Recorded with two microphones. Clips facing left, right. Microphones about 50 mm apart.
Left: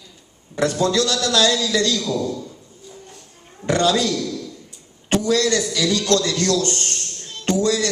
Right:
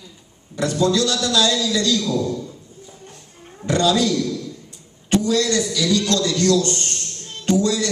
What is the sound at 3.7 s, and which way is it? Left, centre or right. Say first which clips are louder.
Speech: even; left.